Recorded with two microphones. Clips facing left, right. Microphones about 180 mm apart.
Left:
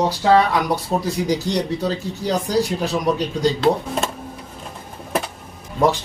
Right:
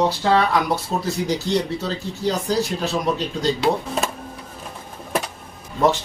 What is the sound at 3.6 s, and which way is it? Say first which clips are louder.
Speech: left 2 dB; centre (ahead or behind).